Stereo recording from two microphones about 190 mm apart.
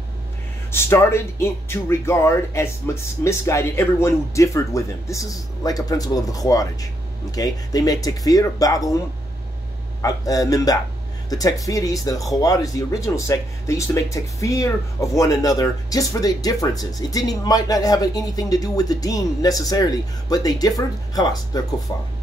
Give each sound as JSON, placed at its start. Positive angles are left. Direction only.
{"t": 0.7, "sound": "speech", "side_deg": 15}
{"t": 10.0, "sound": "speech", "side_deg": 20}